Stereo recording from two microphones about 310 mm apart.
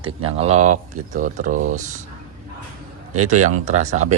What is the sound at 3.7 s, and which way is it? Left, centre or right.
Speech, right.